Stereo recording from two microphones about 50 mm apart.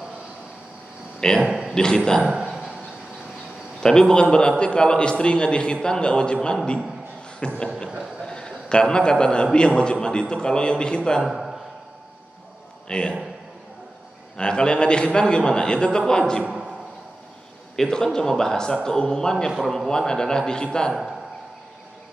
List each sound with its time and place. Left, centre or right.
1.2 s a man's voice: centre
2.4 s a sound: centre
3.8 s a man's voice: centre
11.2 s a man's voice: centre
12.8 s a man's voice: centre
14.3 s a man's voice: centre
16.4 s a sound: right
17.7 s a man's voice: centre
20.9 s a man's voice: centre